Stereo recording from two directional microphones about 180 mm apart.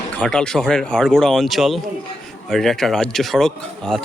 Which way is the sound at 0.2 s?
5° left (ahead or behind).